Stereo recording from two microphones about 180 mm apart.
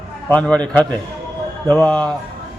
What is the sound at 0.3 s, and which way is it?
A man's voice, 5° left (ahead or behind).